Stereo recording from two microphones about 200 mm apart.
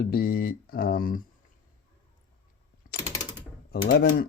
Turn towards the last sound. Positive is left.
turn(degrees=50)  # may be behind; listen again after turning